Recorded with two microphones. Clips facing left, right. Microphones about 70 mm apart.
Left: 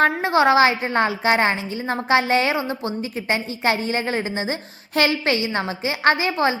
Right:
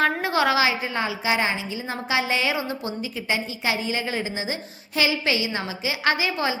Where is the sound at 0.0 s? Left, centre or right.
Left.